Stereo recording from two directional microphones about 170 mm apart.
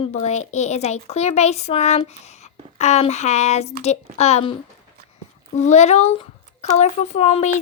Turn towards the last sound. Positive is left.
turn(degrees=40)  # may be behind; listen again after turning